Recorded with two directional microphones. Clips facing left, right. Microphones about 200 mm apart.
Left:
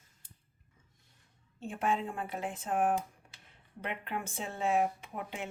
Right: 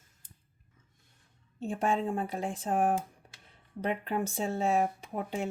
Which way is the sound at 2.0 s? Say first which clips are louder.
Right 5 dB; 35° right (ahead or behind).